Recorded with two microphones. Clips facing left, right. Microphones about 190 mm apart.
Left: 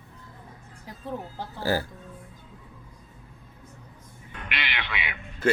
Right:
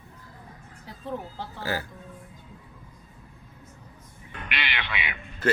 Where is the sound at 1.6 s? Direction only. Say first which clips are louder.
Left 5 dB; 35° left (ahead or behind).